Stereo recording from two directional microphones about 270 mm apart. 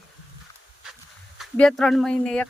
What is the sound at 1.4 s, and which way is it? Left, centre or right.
Speech, centre.